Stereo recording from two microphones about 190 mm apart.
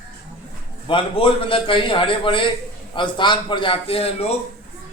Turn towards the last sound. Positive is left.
turn(degrees=30)  # may be behind; listen again after turning